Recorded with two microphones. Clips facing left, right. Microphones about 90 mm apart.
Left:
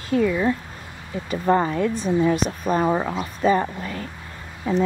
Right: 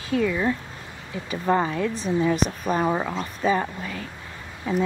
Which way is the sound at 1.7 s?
5° left (ahead or behind).